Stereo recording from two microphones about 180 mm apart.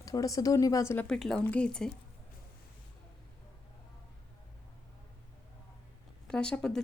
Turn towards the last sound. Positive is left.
turn(degrees=5)  # may be behind; listen again after turning